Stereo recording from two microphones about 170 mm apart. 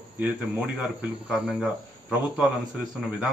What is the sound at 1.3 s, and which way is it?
Speech, 5° right (ahead or behind).